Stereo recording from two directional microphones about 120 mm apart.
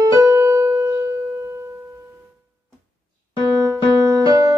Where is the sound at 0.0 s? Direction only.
30° right (ahead or behind).